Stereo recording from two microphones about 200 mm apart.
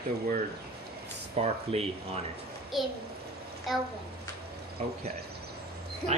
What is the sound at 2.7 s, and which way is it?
A child's voice, centre (ahead or behind).